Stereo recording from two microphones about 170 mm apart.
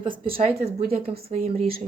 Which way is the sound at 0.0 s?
55° right (ahead or behind).